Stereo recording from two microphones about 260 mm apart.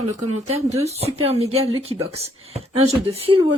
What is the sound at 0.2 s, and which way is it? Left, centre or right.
Speech, right.